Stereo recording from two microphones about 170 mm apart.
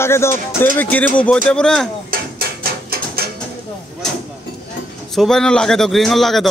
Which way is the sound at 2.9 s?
65° right (ahead or behind).